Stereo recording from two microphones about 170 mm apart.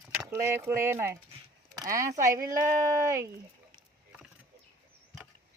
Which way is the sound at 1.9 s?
50° right (ahead or behind).